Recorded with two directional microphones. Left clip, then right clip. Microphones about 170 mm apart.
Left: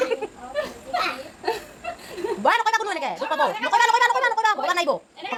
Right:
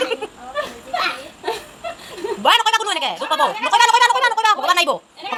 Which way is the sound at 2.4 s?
10° left (ahead or behind).